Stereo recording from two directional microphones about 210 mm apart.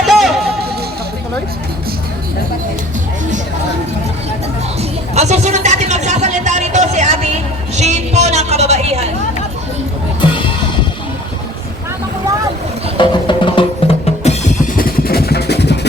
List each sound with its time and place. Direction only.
0.0 s music: centre (ahead or behind)
4.8 s music: 30° right (ahead or behind)
7.8 s a sound: 30° right (ahead or behind)
13.0 s music: 25° left (ahead or behind)
14.8 s vehicle: 45° left (ahead or behind)